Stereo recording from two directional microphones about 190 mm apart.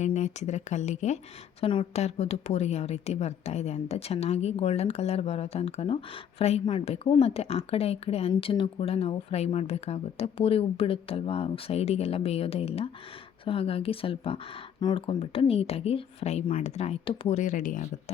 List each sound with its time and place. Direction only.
0.0 s speech: 40° left (ahead or behind)